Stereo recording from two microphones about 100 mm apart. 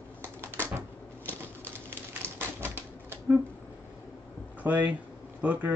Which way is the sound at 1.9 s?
25° right (ahead or behind).